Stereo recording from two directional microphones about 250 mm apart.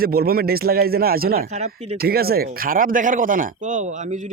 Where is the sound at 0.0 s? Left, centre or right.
Right.